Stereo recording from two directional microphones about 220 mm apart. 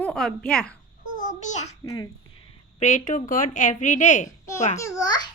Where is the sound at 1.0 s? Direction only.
35° left (ahead or behind).